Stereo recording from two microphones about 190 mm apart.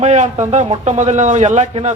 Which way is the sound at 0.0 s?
40° right (ahead or behind).